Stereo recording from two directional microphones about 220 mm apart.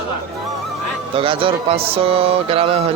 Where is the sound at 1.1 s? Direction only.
25° right (ahead or behind).